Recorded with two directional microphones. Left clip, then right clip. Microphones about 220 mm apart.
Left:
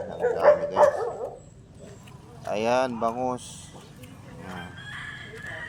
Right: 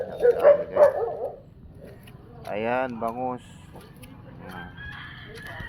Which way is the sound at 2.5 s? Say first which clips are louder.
Left 2 dB; 10° left (ahead or behind).